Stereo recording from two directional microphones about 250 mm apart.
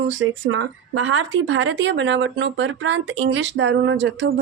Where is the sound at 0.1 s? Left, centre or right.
Right.